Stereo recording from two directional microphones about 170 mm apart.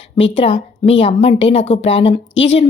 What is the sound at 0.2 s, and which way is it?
A woman's voice, 35° left (ahead or behind).